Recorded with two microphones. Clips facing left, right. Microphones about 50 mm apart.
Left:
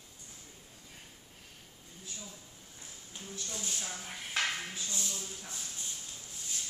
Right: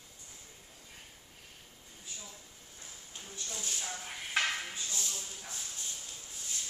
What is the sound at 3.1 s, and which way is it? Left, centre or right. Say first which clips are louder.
Speech: left 2 dB; centre.